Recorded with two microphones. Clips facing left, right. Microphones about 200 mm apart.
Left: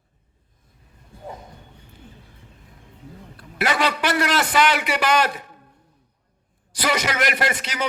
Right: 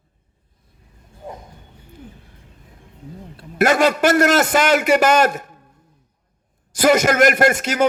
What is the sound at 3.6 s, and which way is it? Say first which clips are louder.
A man's voice: right 7 dB; 45° right (ahead or behind).